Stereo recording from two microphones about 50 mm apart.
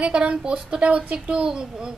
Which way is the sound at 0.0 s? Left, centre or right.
Right.